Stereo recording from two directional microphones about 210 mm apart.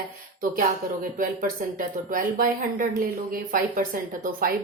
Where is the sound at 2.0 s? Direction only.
40° right (ahead or behind).